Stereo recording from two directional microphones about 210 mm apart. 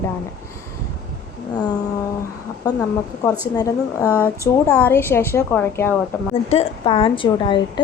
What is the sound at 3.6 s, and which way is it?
Speech, 15° left (ahead or behind).